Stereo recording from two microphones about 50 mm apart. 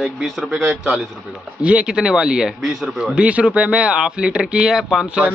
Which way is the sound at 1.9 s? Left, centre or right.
Centre.